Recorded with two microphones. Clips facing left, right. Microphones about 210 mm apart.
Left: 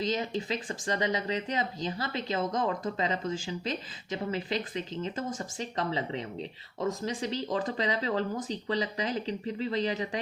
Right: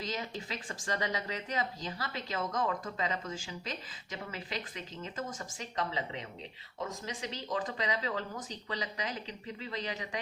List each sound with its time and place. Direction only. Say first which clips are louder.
0.0 s speech: left 8 dB; 25° left (ahead or behind)